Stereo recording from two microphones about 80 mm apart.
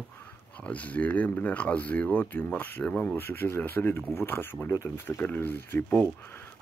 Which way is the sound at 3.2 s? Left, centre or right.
Left.